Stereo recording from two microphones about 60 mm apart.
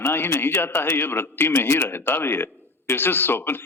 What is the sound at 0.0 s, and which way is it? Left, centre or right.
Speech, left.